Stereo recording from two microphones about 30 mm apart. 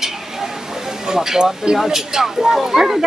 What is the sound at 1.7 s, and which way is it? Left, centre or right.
Speech, centre.